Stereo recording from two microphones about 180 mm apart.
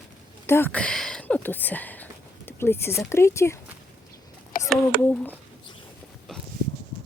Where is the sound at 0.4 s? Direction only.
10° left (ahead or behind).